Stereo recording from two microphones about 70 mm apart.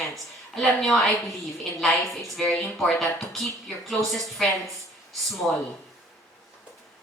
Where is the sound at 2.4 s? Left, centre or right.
Centre.